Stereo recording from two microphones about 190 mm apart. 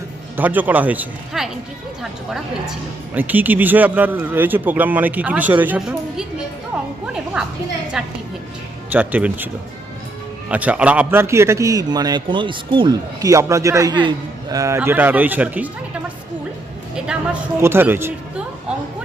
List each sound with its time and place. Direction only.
0.3 s a man's voice: 10° right (ahead or behind)
8.0 s a man's voice: 5° right (ahead or behind)
10.5 s a man's voice: 5° right (ahead or behind)
17.6 s speech: 10° right (ahead or behind)